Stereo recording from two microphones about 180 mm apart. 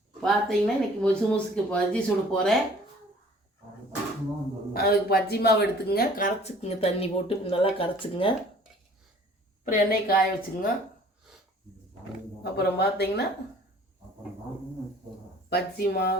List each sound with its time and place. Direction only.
0.2 s speech: centre (ahead or behind)
4.7 s speech: 60° left (ahead or behind); by 8.4 s 30° left (ahead or behind)
9.6 s a woman's voice: 55° left (ahead or behind)
12.4 s speech: 65° left (ahead or behind)
15.4 s speech: 60° left (ahead or behind)